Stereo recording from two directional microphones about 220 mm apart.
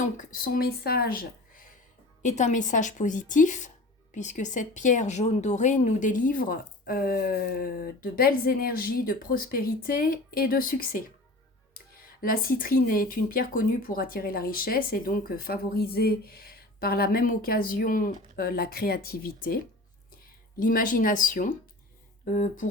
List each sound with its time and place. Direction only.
0.0 s speech: 35° left (ahead or behind)
12.0 s speech: 40° left (ahead or behind)
20.6 s speech: 40° left (ahead or behind)